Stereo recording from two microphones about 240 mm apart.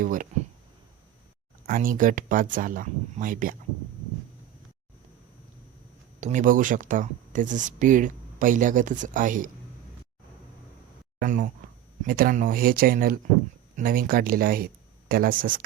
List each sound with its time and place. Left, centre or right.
0.0 s speech: right
1.6 s speech: right
6.1 s speech: right
11.2 s speech: right